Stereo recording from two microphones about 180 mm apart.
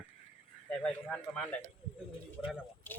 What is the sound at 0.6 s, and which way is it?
Speech, 5° left (ahead or behind).